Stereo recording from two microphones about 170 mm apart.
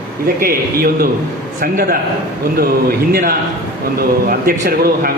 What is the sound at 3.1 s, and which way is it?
A man's voice, 60° right (ahead or behind).